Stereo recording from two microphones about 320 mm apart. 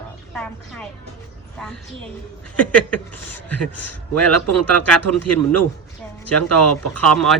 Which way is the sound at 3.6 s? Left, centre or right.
Left.